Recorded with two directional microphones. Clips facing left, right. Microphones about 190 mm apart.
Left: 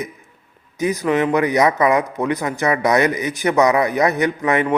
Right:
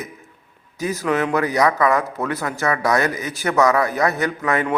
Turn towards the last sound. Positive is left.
turn(degrees=20)  # may be behind; listen again after turning